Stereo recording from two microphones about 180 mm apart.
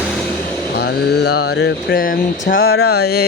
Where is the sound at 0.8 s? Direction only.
60° left (ahead or behind).